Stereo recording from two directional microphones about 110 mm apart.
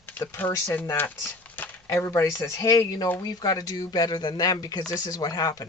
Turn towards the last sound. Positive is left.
turn(degrees=35)  # may be behind; listen again after turning